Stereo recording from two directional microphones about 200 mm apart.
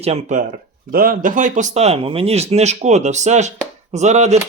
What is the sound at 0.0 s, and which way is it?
Speech, 35° right (ahead or behind).